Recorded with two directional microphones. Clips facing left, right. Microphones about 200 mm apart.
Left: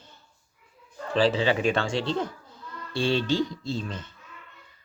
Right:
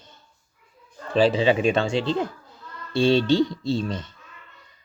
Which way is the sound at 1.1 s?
15° right (ahead or behind).